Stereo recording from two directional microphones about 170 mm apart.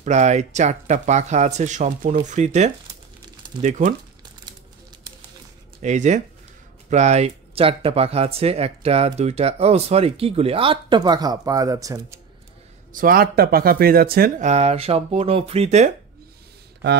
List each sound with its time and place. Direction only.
0.0 s speech: 45° right (ahead or behind)
5.8 s speech: 45° right (ahead or behind); by 12.2 s 20° right (ahead or behind)
12.9 s speech: 55° right (ahead or behind)
14.4 s speech: 40° right (ahead or behind)